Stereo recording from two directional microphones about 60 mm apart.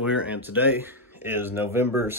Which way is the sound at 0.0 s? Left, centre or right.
Centre.